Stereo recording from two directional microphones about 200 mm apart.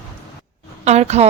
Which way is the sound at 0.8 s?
35° right (ahead or behind).